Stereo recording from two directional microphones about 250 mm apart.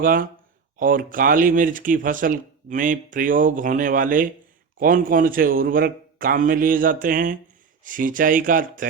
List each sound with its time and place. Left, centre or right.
0.0 s speech: right